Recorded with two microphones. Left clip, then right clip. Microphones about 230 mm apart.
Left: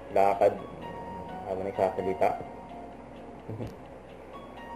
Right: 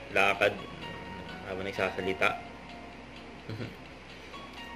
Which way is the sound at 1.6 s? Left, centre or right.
Right.